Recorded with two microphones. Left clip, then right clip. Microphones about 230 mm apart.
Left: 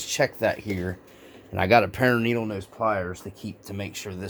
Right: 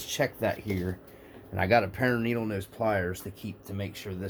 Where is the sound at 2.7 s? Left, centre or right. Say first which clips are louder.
Left 3 dB; centre.